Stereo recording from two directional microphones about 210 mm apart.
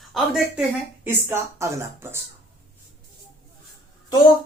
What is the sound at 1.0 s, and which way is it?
Speech, 10° right (ahead or behind).